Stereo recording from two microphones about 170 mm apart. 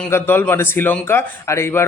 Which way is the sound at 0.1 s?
15° left (ahead or behind).